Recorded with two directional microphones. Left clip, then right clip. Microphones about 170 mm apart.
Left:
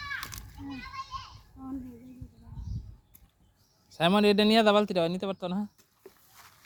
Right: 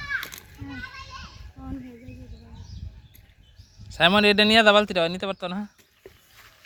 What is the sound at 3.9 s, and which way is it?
Speech, centre (ahead or behind).